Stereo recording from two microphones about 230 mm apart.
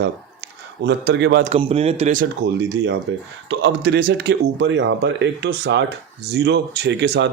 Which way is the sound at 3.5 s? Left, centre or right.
Right.